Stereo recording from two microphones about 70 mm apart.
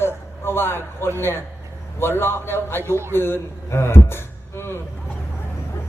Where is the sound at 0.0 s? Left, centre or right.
Left.